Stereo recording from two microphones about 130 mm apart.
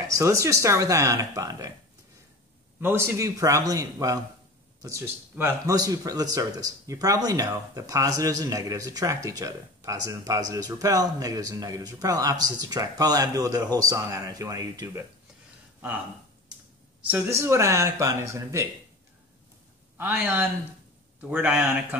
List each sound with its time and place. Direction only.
0.1 s speech: 25° right (ahead or behind)
2.8 s speech: 20° right (ahead or behind)
5.7 s speech: 25° right (ahead or behind)
17.3 s speech: 20° right (ahead or behind)
20.0 s a man's voice: 15° right (ahead or behind)